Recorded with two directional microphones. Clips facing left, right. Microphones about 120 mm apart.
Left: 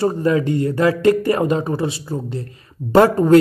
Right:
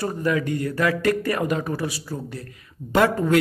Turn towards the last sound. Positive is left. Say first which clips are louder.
# left 7 dB
turn(degrees=35)  # may be behind; listen again after turning